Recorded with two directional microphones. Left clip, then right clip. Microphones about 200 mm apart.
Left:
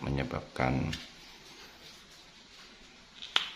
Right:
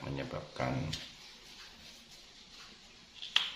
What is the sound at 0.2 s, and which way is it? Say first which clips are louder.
Speech: left 5 dB; 55° left (ahead or behind).